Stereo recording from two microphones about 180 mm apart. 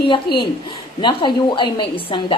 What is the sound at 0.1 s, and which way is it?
Speech, 30° left (ahead or behind).